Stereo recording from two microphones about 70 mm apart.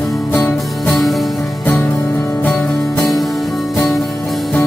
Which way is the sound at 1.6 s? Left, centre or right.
Centre.